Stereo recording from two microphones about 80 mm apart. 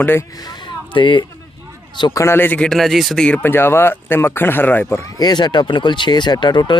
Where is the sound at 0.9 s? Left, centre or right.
Left.